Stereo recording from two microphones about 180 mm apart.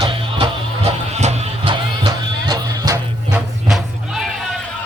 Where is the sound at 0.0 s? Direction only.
25° right (ahead or behind).